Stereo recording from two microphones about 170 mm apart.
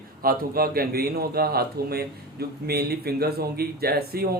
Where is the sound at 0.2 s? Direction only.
60° right (ahead or behind).